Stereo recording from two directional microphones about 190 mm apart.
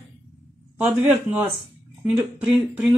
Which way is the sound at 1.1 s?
10° right (ahead or behind).